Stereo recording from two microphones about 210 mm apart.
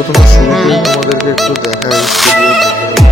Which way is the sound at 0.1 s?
Centre (ahead or behind).